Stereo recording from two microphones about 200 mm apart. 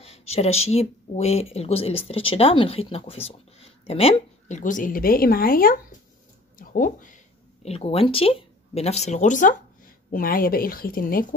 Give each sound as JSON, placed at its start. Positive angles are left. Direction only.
{"t": 0.0, "sound": "speech", "side_deg": 30}
{"t": 7.6, "sound": "speech", "side_deg": 30}